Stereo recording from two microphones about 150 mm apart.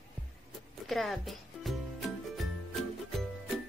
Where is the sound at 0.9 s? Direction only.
Centre (ahead or behind).